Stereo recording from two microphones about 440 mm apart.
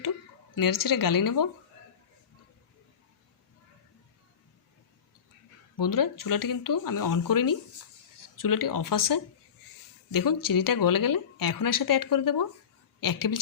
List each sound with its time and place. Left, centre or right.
0.5 s a woman's voice: left
5.7 s a woman's voice: left